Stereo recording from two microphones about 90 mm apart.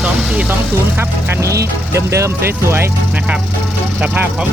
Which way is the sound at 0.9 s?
30° right (ahead or behind).